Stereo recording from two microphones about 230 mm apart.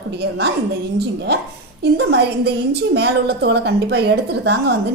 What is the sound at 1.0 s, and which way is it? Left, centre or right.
Speech, right.